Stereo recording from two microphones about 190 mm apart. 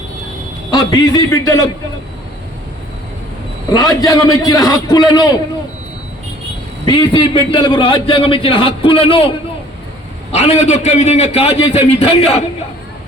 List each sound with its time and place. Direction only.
0.9 s a man's voice: 20° left (ahead or behind)
3.7 s a man's voice: 20° left (ahead or behind)
6.8 s a man's voice: 25° left (ahead or behind)
10.3 s a man's voice: 35° left (ahead or behind)